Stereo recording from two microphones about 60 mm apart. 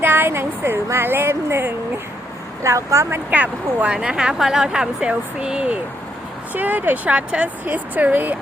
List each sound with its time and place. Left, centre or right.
0.0 s a woman's voice: right
2.6 s speech: right
3.2 s speech: right
3.9 s speech: centre; by 8.4 s right